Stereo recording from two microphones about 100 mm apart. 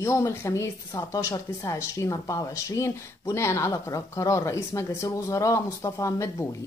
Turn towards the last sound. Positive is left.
turn(degrees=30)  # may be behind; listen again after turning